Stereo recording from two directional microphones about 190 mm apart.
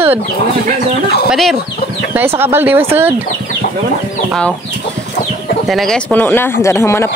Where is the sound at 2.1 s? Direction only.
10° right (ahead or behind).